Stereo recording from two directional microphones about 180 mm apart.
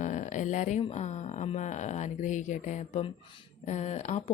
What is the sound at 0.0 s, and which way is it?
A woman's voice, 45° left (ahead or behind).